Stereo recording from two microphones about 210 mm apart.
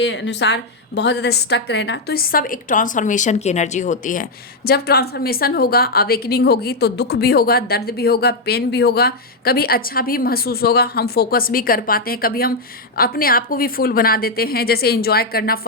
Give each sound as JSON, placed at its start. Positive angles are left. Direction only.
{"t": 0.0, "sound": "a woman's voice", "side_deg": 60}